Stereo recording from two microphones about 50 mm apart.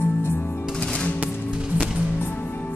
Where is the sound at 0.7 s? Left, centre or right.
Centre.